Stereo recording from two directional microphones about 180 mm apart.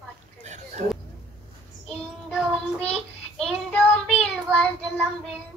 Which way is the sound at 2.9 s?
Centre (ahead or behind).